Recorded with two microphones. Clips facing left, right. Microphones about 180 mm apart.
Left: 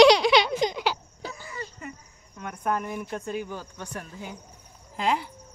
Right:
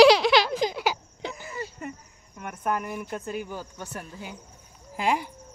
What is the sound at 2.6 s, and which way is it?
Speech, 5° right (ahead or behind).